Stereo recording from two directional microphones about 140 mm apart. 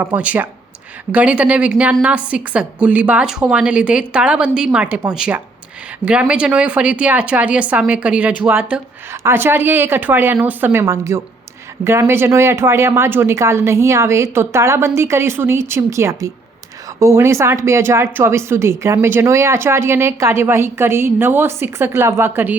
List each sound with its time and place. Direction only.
0.0 s a woman's voice: 10° right (ahead or behind)